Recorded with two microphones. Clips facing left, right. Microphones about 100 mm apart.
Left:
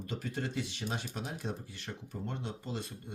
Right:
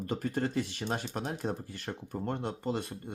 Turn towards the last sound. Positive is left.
turn(degrees=-50)  # may be behind; listen again after turning